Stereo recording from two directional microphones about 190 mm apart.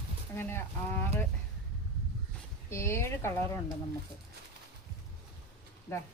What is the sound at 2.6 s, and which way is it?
Speech, 15° left (ahead or behind).